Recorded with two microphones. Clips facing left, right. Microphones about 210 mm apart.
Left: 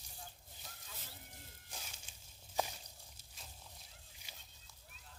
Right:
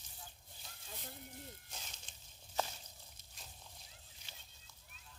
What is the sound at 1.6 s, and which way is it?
Walk, 10° left (ahead or behind).